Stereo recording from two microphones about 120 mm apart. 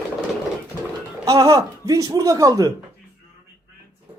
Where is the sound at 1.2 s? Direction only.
30° right (ahead or behind).